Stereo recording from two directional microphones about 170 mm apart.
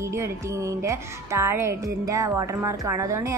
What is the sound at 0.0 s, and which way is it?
A woman's voice, 15° right (ahead or behind).